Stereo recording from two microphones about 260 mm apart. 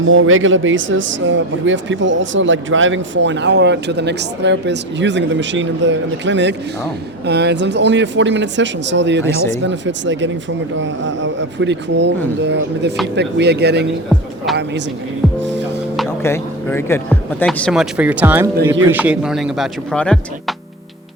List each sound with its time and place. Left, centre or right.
0.0 s speech: right
15.5 s music: right
16.0 s a man's voice: centre